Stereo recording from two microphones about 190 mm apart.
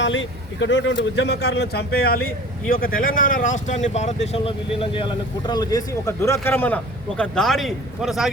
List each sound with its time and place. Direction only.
0.0 s speech: 75° left (ahead or behind); by 8.3 s centre (ahead or behind)